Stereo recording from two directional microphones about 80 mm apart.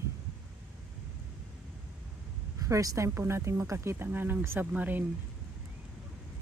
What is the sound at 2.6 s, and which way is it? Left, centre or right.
A woman's voice, right.